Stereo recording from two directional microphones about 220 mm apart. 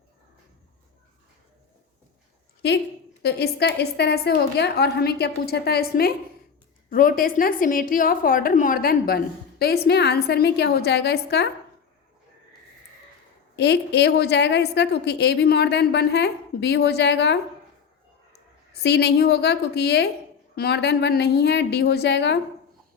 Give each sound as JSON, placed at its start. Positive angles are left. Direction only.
{"t": 2.6, "sound": "a woman's voice", "side_deg": 50}
{"t": 13.6, "sound": "a woman's voice", "side_deg": 50}
{"t": 18.7, "sound": "a woman's voice", "side_deg": 50}